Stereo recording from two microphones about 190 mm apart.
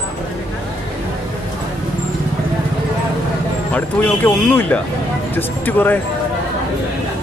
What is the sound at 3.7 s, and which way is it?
Speech, 10° left (ahead or behind).